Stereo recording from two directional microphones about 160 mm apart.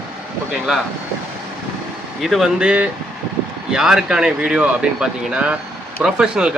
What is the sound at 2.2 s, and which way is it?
Speech, centre (ahead or behind).